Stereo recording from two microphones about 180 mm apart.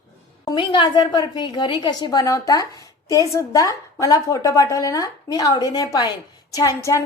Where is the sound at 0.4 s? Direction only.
25° left (ahead or behind).